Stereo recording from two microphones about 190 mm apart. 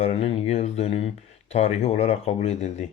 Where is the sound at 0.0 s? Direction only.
35° left (ahead or behind).